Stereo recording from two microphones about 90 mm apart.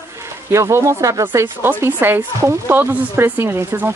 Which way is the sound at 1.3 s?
25° right (ahead or behind).